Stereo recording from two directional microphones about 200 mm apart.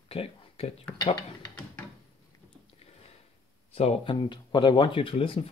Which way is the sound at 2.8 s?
30° left (ahead or behind).